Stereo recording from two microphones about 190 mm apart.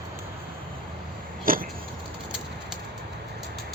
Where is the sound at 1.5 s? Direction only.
45° right (ahead or behind).